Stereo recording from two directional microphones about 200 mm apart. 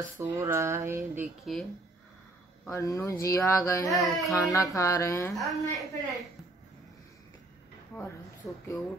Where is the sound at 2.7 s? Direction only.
15° left (ahead or behind).